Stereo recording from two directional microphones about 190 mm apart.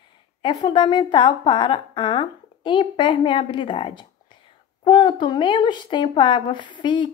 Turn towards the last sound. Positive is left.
turn(degrees=25)  # may be behind; listen again after turning